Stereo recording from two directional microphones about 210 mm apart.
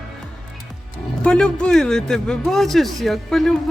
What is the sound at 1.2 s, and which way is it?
A man's voice, 5° left (ahead or behind).